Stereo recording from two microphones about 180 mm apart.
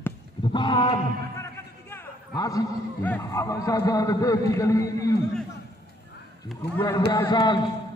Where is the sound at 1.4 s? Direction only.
15° left (ahead or behind).